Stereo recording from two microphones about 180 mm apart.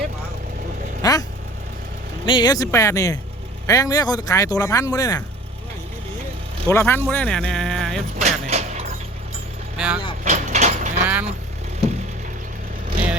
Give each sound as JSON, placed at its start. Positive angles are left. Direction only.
{"t": 1.0, "sound": "speech", "side_deg": 20}
{"t": 2.2, "sound": "speech", "side_deg": 25}
{"t": 6.7, "sound": "speech", "side_deg": 15}
{"t": 8.2, "sound": "music", "side_deg": -40}
{"t": 9.7, "sound": "speech", "side_deg": -5}
{"t": 10.2, "sound": "livestock", "side_deg": -40}
{"t": 11.0, "sound": "vehicle", "side_deg": -10}